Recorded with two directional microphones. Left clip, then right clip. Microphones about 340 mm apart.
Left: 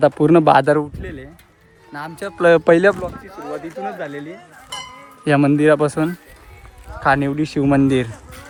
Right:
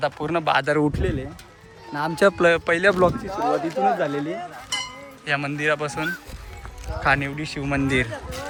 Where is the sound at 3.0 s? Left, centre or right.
Centre.